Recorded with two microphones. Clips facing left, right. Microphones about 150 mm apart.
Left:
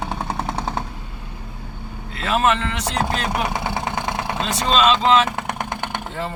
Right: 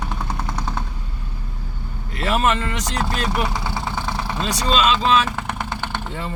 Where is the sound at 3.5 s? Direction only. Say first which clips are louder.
Left 2 dB; 55° left (ahead or behind).